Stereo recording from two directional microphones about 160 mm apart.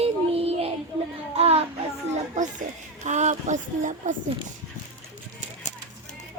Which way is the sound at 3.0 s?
45° right (ahead or behind).